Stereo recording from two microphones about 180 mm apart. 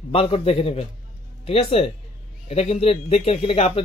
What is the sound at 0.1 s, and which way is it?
Speech, 30° left (ahead or behind).